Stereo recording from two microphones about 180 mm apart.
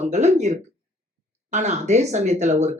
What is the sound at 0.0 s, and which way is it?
Speech, 40° right (ahead or behind).